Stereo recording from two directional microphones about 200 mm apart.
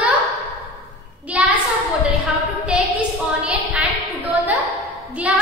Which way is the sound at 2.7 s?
5° right (ahead or behind).